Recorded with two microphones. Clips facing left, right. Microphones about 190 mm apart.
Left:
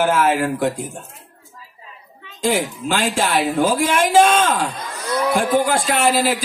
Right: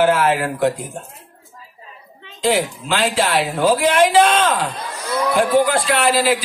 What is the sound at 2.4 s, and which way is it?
Speech, 45° left (ahead or behind).